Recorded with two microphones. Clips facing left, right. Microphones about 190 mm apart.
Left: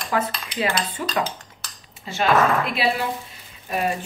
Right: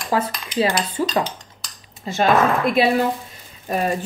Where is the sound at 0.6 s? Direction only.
30° right (ahead or behind).